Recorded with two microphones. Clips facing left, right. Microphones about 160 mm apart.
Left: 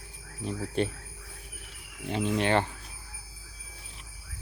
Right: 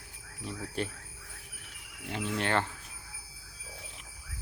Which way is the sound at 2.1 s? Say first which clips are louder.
Left 5 dB; 20° left (ahead or behind).